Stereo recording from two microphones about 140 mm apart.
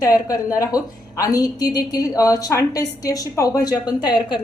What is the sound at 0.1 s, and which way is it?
Speech, 25° left (ahead or behind).